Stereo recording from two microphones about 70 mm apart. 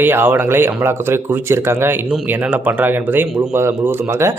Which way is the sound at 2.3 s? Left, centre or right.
Right.